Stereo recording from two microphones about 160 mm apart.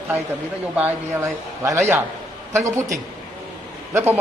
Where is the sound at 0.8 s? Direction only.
15° right (ahead or behind).